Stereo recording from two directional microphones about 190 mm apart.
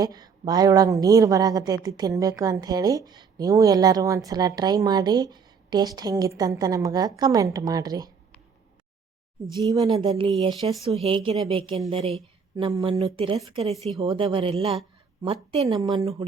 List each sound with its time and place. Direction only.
0.0 s a woman's voice: 20° right (ahead or behind)
9.5 s a woman's voice: 20° right (ahead or behind)
15.6 s speech: 20° right (ahead or behind)